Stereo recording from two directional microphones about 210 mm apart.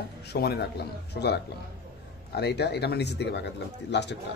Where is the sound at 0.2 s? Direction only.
50° left (ahead or behind).